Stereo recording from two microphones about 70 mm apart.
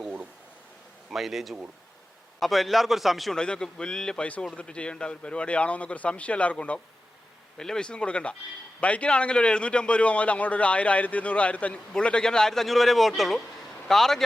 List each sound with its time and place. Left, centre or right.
1.1 s a man's voice: centre
3.3 s a man's voice: centre